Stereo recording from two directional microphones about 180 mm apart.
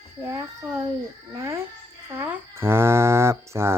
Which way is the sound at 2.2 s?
15° right (ahead or behind).